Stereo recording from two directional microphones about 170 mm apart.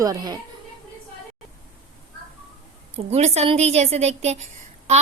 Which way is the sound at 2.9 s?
40° right (ahead or behind).